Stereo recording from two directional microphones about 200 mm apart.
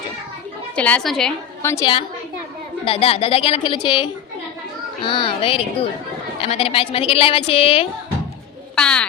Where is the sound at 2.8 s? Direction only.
30° left (ahead or behind).